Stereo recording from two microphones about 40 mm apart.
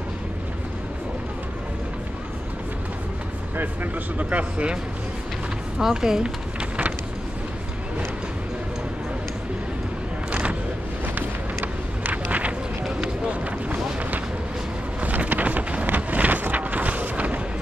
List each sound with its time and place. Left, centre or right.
4.2 s speech: right
5.8 s speech: centre
6.2 s a sound: right
11.1 s run: right
13.3 s boat: right
15.0 s vehicle: right